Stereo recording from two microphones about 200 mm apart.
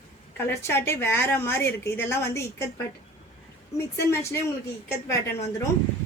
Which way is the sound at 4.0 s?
15° left (ahead or behind).